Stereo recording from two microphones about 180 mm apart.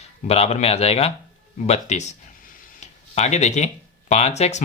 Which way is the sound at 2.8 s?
40° left (ahead or behind).